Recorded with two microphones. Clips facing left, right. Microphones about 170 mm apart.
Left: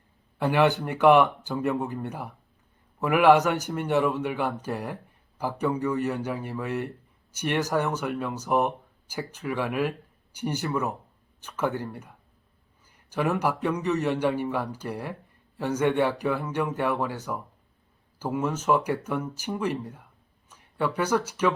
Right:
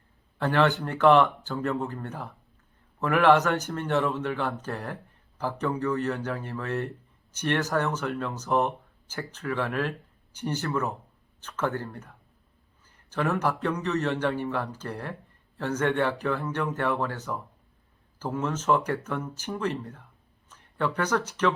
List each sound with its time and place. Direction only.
0.3 s a man's voice: 15° left (ahead or behind)